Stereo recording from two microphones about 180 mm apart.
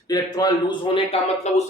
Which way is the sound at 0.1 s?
20° left (ahead or behind).